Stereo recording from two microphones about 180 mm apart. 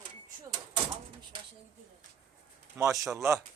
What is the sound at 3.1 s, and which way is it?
Speech, 15° right (ahead or behind).